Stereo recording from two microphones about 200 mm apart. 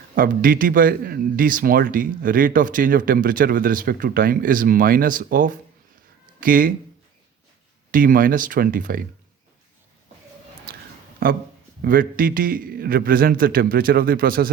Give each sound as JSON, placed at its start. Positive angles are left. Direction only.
{"t": 0.2, "sound": "a man's voice", "side_deg": -45}
{"t": 7.9, "sound": "a man's voice", "side_deg": -45}
{"t": 11.2, "sound": "a man's voice", "side_deg": -45}